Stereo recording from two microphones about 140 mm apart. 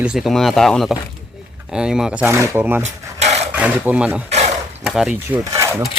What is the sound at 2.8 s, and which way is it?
Filing, 55° right (ahead or behind).